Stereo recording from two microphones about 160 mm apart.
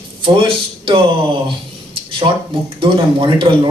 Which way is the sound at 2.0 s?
35° right (ahead or behind).